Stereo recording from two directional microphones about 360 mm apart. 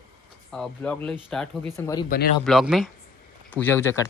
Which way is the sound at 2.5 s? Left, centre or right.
Centre.